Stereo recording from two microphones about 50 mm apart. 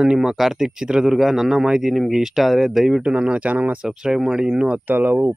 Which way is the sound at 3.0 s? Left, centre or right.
Right.